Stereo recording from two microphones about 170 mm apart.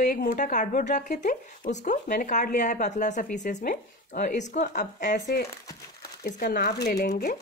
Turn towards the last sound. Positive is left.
turn(degrees=75)  # may be behind; listen again after turning